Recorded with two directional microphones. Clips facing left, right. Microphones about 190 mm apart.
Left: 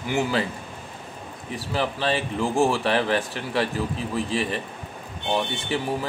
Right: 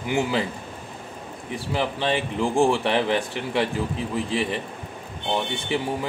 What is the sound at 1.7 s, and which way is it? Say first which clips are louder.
Speech: even; 15° right (ahead or behind).